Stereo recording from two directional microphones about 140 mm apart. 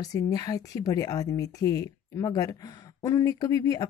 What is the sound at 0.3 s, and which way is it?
Speech, 25° left (ahead or behind).